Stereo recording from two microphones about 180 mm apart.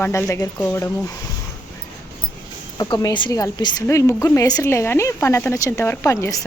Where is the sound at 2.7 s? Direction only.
20° left (ahead or behind).